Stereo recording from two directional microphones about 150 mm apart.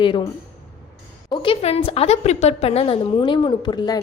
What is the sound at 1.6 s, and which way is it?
A woman's voice, 40° left (ahead or behind).